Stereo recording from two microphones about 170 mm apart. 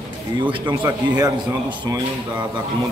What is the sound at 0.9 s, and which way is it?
Speech, 20° right (ahead or behind).